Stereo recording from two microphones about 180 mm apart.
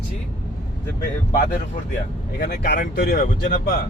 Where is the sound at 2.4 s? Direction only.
55° left (ahead or behind).